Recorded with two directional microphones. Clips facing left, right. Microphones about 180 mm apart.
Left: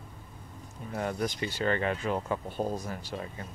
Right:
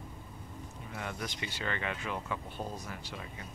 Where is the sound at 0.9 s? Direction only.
40° left (ahead or behind).